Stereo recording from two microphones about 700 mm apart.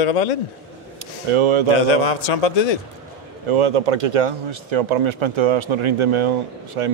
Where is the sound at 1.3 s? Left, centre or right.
Right.